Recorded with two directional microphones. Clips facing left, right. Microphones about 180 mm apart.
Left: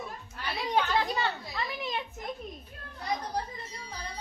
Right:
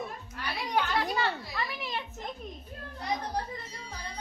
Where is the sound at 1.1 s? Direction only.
20° left (ahead or behind).